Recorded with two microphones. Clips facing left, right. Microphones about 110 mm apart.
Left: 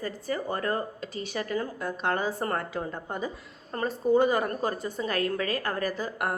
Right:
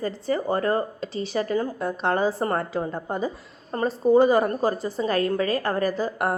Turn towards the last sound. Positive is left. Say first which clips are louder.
# right 6 dB
turn(degrees=-35)  # may be behind; listen again after turning